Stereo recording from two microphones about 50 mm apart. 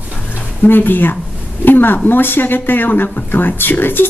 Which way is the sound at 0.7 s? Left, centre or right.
Left.